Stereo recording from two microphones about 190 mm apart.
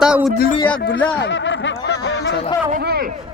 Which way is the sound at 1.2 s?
70° left (ahead or behind).